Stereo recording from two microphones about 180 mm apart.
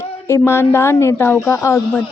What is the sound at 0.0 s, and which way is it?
Speech, 15° left (ahead or behind).